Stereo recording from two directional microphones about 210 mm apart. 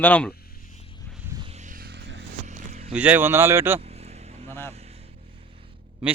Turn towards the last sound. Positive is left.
turn(degrees=-30)  # may be behind; listen again after turning